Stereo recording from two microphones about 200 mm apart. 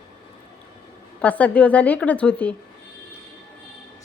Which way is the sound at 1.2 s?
5° left (ahead or behind).